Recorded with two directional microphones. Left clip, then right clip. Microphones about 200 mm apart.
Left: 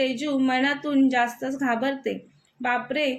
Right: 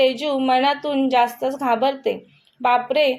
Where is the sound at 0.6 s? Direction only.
55° right (ahead or behind).